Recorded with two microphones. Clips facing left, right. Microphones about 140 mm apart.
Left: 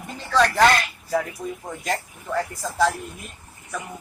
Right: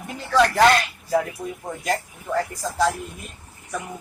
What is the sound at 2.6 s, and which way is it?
Speech, centre (ahead or behind).